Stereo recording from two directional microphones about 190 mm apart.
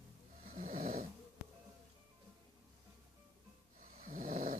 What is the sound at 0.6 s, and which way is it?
Snoring, 45° right (ahead or behind).